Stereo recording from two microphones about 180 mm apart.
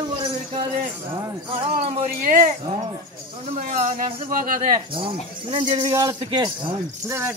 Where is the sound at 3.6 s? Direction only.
45° right (ahead or behind).